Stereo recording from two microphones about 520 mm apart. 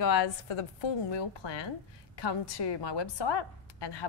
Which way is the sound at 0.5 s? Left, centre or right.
Left.